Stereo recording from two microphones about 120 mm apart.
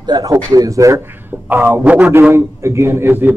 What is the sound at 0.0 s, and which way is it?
A man's voice, 30° right (ahead or behind).